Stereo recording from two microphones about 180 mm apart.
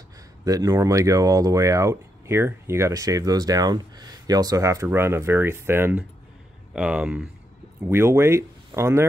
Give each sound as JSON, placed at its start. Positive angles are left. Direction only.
{"t": 0.5, "sound": "speech", "side_deg": -20}